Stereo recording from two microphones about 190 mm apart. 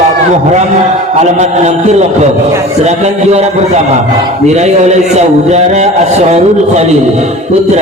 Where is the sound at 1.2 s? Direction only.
35° right (ahead or behind).